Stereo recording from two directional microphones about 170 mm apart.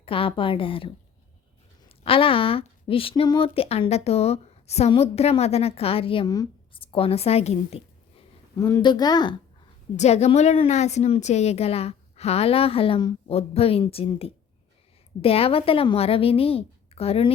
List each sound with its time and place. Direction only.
0.0 s speech: 30° left (ahead or behind)
2.0 s speech: 30° left (ahead or behind)
8.5 s speech: 15° left (ahead or behind)
10.0 s speech: 40° left (ahead or behind)